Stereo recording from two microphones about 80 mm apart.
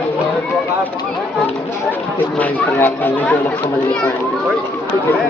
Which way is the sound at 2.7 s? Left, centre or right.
Left.